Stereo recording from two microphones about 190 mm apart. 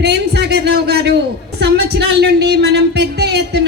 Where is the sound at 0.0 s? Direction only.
60° right (ahead or behind).